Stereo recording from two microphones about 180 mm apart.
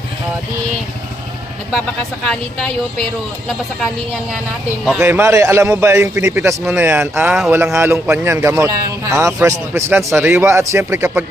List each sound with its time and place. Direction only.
2.2 s speech: 5° left (ahead or behind)
5.0 s a man's voice: 15° right (ahead or behind)
7.5 s a man's voice: 15° right (ahead or behind)